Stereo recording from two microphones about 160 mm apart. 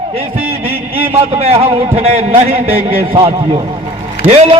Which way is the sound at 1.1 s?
40° right (ahead or behind).